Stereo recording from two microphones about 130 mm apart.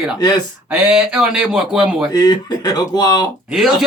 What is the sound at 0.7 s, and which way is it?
Speech, 10° right (ahead or behind).